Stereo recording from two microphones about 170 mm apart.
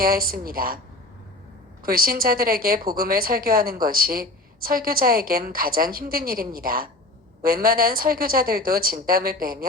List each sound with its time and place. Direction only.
0.0 s a woman's voice: 60° right (ahead or behind)
1.8 s a woman's voice: 60° right (ahead or behind)